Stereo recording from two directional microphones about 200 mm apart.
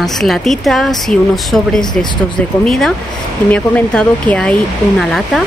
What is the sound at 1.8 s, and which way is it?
Speech, 20° left (ahead or behind).